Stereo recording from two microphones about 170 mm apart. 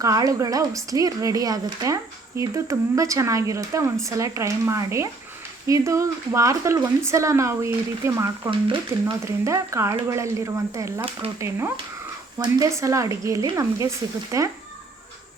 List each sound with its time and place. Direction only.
0.0 s speech: 20° right (ahead or behind)
8.4 s speech: 30° right (ahead or behind)
9.2 s speech: 15° right (ahead or behind)